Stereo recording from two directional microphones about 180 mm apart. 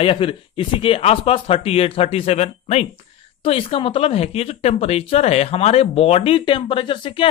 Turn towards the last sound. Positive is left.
turn(degrees=30)  # may be behind; listen again after turning